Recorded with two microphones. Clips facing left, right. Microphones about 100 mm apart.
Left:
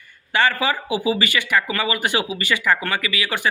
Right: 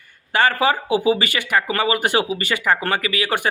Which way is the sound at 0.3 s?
45° right (ahead or behind).